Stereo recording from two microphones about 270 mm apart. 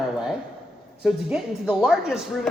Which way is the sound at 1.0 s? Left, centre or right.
Centre.